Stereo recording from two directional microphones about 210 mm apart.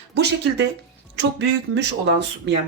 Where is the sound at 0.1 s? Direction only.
55° right (ahead or behind).